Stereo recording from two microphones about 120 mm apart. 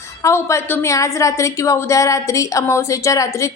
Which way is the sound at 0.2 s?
25° left (ahead or behind).